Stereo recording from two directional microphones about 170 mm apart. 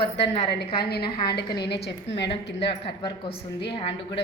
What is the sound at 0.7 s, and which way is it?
A woman's voice, 70° left (ahead or behind).